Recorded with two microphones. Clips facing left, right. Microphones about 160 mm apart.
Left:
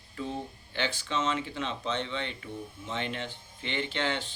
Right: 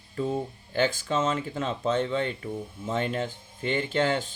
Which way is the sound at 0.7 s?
45° right (ahead or behind).